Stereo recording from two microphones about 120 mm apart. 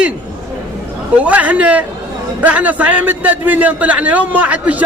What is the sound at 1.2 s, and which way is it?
A man's voice, 10° right (ahead or behind).